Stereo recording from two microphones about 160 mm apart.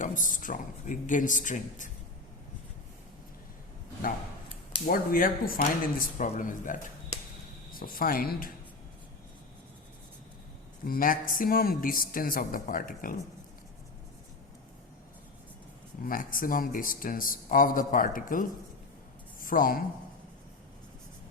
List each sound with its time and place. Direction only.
0.0 s speech: 55° left (ahead or behind)
4.9 s a man's voice: 60° left (ahead or behind)
6.1 s speech: 50° left (ahead or behind)
7.7 s a man's voice: 65° left (ahead or behind)
10.8 s a man's voice: 65° left (ahead or behind)
16.0 s a man's voice: 60° left (ahead or behind)